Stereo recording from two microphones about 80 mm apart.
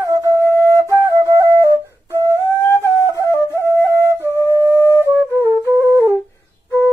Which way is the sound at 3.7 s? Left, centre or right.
Right.